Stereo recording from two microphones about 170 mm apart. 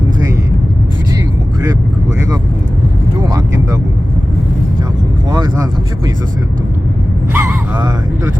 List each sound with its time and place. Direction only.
5.3 s vehicle: 25° right (ahead or behind)
7.3 s speech: 15° right (ahead or behind)